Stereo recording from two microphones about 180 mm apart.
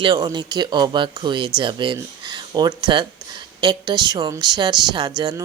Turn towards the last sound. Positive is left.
turn(degrees=-25)  # may be behind; listen again after turning